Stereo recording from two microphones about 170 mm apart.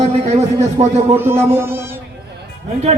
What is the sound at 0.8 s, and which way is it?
Speech, 40° right (ahead or behind).